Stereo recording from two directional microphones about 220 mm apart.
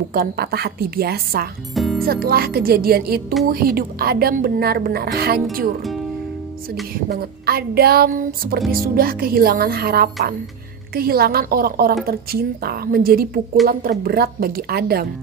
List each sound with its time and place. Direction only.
0.1 s a woman's voice: 45° right (ahead or behind)
1.8 s music: centre (ahead or behind)
2.0 s a woman's voice: 45° right (ahead or behind)
7.1 s a woman's voice: 45° right (ahead or behind)
8.5 s speech: centre (ahead or behind)
8.8 s a woman's voice: 40° right (ahead or behind)